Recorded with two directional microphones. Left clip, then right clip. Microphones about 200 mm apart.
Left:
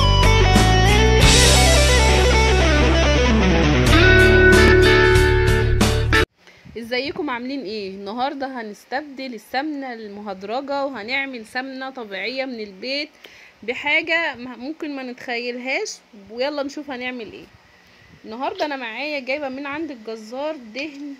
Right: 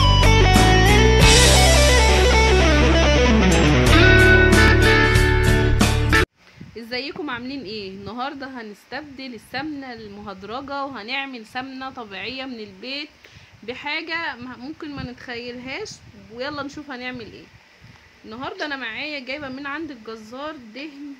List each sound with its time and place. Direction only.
0.0 s music: centre (ahead or behind)
6.8 s a woman's voice: 15° left (ahead or behind)
18.3 s a woman's voice: 10° left (ahead or behind)